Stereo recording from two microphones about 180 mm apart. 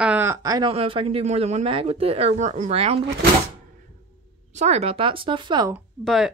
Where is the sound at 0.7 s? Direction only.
30° right (ahead or behind).